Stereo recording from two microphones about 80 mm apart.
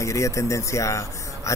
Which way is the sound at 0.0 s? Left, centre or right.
Left.